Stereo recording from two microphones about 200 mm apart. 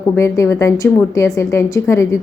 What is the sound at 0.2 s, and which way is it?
Speech, 15° left (ahead or behind).